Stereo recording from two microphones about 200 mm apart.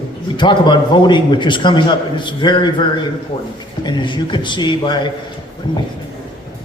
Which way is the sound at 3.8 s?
25° left (ahead or behind).